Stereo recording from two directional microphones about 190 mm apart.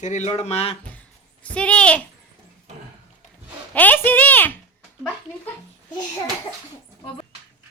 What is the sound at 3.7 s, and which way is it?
Speech, 10° left (ahead or behind).